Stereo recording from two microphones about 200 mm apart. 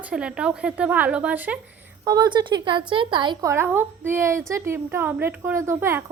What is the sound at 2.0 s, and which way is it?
A woman's voice, 20° right (ahead or behind).